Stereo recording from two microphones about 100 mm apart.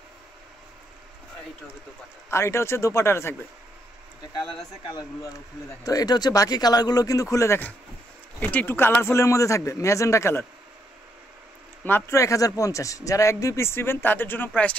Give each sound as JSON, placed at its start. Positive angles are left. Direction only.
{"t": 2.2, "sound": "speech", "side_deg": 25}
{"t": 5.9, "sound": "speech", "side_deg": 40}
{"t": 11.8, "sound": "speech", "side_deg": 25}